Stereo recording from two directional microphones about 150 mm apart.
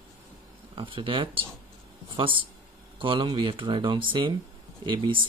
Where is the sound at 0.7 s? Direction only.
35° right (ahead or behind).